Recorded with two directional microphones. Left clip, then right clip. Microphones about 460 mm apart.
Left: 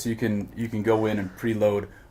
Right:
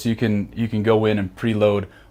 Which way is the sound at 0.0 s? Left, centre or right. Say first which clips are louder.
Right 5 dB; right.